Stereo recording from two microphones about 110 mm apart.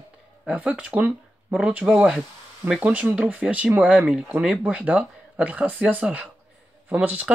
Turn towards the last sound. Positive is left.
turn(degrees=-15)  # may be behind; listen again after turning